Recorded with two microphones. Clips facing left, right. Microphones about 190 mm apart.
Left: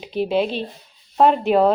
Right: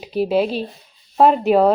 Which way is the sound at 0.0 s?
5° right (ahead or behind).